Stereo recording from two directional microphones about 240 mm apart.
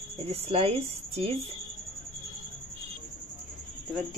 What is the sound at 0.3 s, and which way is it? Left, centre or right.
A woman's voice, right.